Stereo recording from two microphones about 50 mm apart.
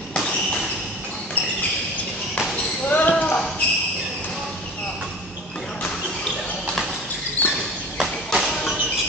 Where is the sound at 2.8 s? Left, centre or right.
Left.